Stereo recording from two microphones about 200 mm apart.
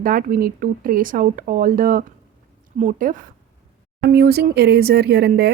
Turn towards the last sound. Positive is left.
turn(degrees=-55)  # may be behind; listen again after turning